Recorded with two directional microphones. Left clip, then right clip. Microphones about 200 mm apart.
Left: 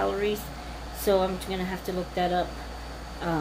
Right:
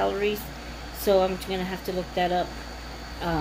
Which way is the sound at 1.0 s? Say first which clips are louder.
Right 2 dB; 15° right (ahead or behind).